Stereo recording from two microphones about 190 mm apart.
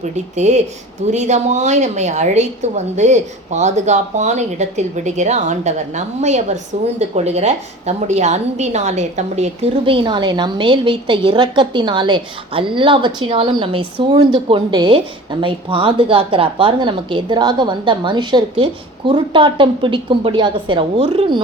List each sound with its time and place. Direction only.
0.0 s a woman's voice: 35° right (ahead or behind)